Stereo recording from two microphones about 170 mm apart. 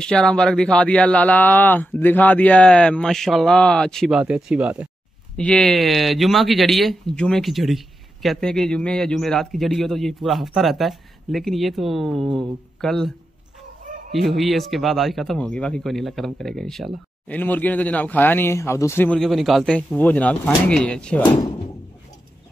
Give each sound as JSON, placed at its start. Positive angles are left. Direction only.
{"t": 0.0, "sound": "speech", "side_deg": 5}
{"t": 14.1, "sound": "speech", "side_deg": 0}
{"t": 19.1, "sound": "speech", "side_deg": 0}
{"t": 21.3, "sound": "speech", "side_deg": 25}